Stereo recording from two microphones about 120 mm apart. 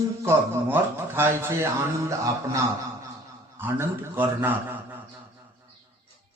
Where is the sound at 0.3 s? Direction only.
20° right (ahead or behind).